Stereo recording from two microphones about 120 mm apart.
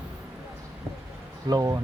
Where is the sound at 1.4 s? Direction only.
30° right (ahead or behind).